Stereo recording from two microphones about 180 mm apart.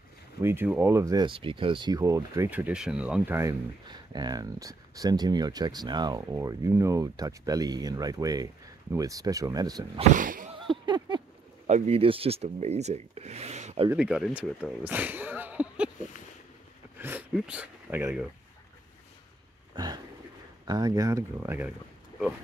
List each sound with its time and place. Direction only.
0.4 s speech: 15° right (ahead or behind)
3.8 s speech: 25° right (ahead or behind)
10.1 s a sound: 45° right (ahead or behind)
10.7 s a sound: 25° right (ahead or behind)
11.6 s speech: 35° right (ahead or behind)
13.8 s speech: 5° right (ahead or behind)
17.0 s speech: 10° right (ahead or behind)
19.7 s a sound: 20° right (ahead or behind)
20.6 s speech: 20° right (ahead or behind)